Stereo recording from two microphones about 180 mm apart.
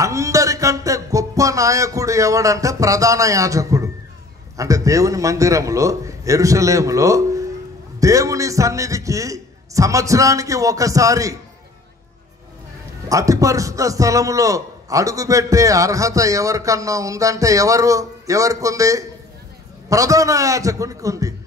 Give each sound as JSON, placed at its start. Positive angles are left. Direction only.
{"t": 0.0, "sound": "a man's voice", "side_deg": -15}
{"t": 13.1, "sound": "a man's voice", "side_deg": -20}